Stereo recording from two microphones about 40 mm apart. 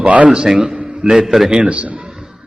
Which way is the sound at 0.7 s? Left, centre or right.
Right.